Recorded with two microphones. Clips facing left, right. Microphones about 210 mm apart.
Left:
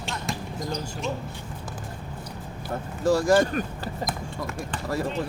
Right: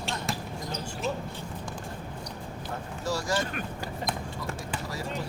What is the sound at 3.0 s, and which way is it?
Speech, 55° left (ahead or behind).